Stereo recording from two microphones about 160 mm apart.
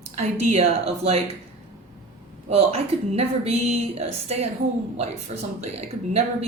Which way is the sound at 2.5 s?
40° right (ahead or behind).